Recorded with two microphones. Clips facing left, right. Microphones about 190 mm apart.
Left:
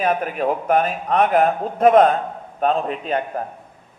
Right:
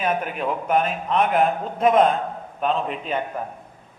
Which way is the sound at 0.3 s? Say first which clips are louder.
Left 3 dB; 45° left (ahead or behind).